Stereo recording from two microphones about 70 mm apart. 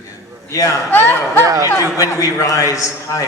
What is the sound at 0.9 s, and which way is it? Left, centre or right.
Speech, left.